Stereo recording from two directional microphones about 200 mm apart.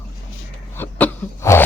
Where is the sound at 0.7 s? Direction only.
10° left (ahead or behind).